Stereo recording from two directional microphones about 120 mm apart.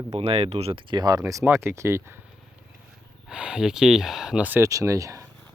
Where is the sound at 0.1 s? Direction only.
55° right (ahead or behind); by 1.2 s 35° right (ahead or behind).